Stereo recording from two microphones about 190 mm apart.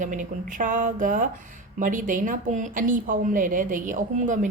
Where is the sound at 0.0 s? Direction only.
45° right (ahead or behind).